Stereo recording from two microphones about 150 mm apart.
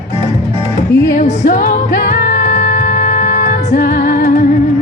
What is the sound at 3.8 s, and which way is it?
Music, 85° left.